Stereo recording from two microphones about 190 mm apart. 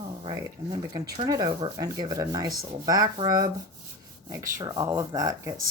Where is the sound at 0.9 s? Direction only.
20° right (ahead or behind).